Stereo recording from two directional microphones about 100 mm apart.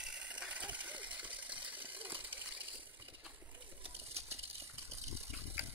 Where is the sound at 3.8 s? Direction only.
85° right.